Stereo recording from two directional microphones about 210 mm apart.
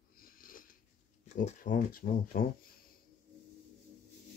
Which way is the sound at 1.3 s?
35° left (ahead or behind).